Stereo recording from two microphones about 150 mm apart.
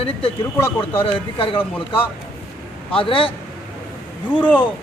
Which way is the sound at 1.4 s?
35° left (ahead or behind).